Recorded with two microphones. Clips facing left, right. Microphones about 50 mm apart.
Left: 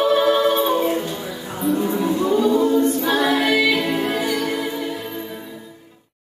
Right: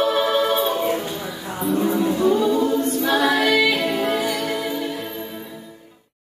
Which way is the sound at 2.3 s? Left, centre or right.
Centre.